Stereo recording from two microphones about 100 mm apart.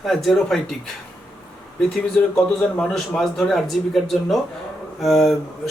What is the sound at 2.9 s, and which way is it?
Speech, 5° left (ahead or behind).